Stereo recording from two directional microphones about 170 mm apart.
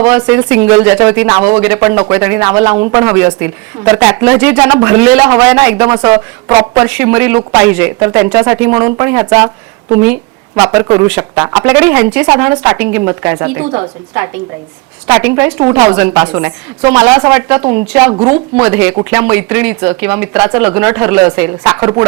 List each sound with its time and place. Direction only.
0.0 s speech: 5° right (ahead or behind)
6.5 s speech: 20° right (ahead or behind)
6.8 s a woman's voice: 5° right (ahead or behind)